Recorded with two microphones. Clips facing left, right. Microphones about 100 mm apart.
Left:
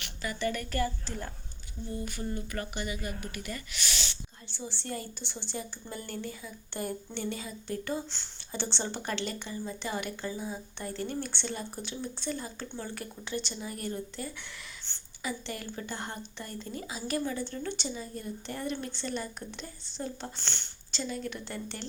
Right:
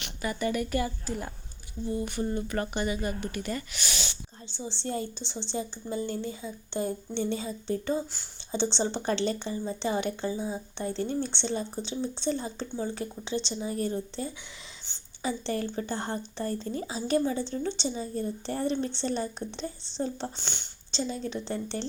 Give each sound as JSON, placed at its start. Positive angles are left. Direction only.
{"t": 0.0, "sound": "speech", "side_deg": -20}
{"t": 20.2, "sound": "speech", "side_deg": -15}